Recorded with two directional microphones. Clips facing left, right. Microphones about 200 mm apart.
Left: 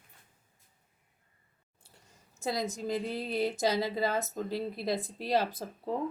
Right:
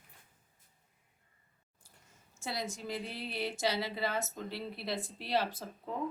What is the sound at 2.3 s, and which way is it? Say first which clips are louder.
A woman's voice: left 6 dB; 40° left (ahead or behind).